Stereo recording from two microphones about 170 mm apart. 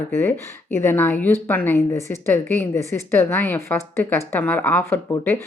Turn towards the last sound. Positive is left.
turn(degrees=15)  # may be behind; listen again after turning